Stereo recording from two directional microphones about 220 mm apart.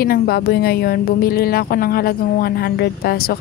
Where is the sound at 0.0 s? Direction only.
45° left (ahead or behind).